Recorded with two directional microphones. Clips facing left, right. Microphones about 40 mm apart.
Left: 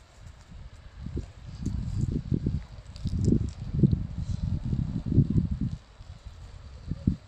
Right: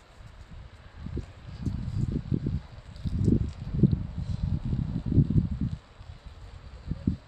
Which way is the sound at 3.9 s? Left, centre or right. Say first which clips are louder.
Even; centre.